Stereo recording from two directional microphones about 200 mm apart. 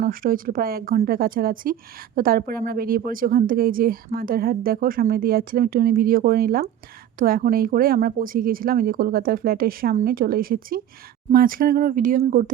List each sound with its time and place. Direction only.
0.0 s speech: 45° right (ahead or behind)